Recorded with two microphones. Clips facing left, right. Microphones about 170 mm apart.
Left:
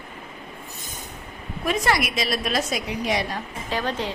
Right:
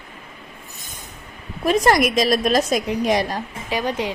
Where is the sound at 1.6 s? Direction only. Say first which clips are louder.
Right 7 dB; 40° right (ahead or behind).